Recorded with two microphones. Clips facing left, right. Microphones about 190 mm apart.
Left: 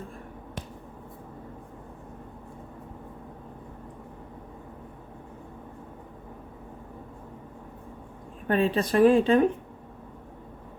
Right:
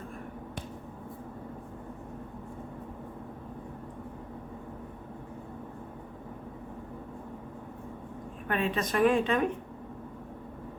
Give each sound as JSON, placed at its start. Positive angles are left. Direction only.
{"t": 8.4, "sound": "a woman's voice", "side_deg": 35}